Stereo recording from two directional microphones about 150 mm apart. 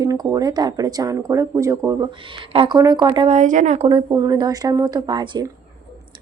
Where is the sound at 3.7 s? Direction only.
35° right (ahead or behind).